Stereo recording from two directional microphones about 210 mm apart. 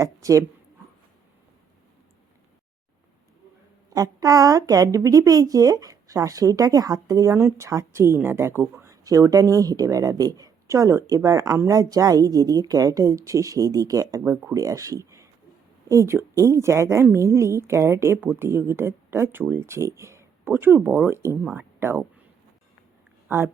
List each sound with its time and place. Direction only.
0.0 s a woman's voice: 15° right (ahead or behind)
3.8 s a woman's voice: 15° right (ahead or behind)